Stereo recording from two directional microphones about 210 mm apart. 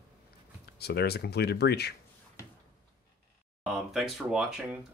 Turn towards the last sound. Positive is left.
turn(degrees=-5)  # may be behind; listen again after turning